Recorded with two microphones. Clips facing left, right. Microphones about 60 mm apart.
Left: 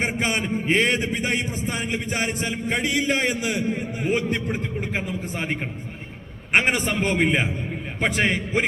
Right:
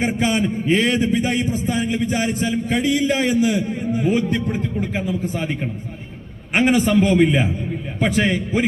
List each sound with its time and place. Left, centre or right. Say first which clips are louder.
0.2 s a man's voice: right 4 dB; left